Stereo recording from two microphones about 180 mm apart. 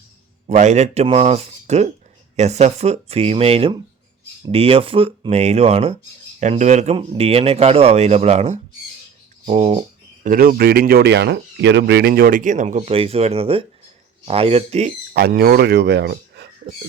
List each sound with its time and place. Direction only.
0.4 s speech: 40° right (ahead or behind)
10.2 s speech: 50° right (ahead or behind)
15.1 s speech: 60° right (ahead or behind)